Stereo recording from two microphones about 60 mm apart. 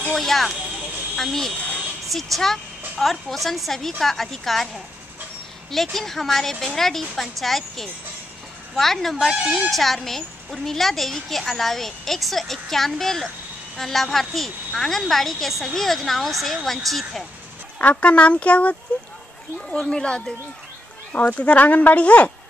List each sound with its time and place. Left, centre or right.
0.1 s speech: centre
17.7 s speech: left
19.9 s speech: centre